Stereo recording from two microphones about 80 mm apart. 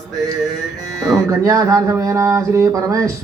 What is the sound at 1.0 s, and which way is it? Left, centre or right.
Speech, right.